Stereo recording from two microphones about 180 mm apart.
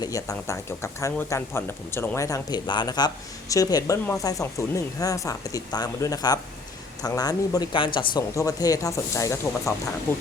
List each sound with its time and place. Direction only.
0.0 s speech: 20° left (ahead or behind)